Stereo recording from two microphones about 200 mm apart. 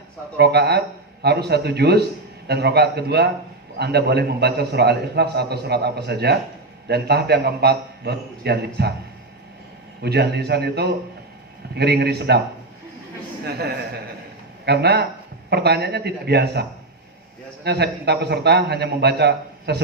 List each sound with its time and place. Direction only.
0.3 s a man's voice: 55° right (ahead or behind)
10.0 s a man's voice: 55° right (ahead or behind)
13.4 s a man's voice: 55° right (ahead or behind)